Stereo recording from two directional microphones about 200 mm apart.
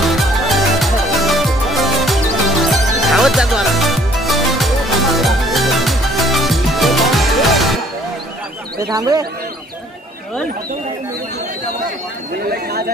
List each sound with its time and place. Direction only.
0.0 s music: centre (ahead or behind)
8.7 s speech: 20° right (ahead or behind)